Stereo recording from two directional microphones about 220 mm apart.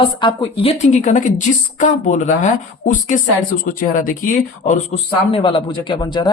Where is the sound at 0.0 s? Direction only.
20° left (ahead or behind).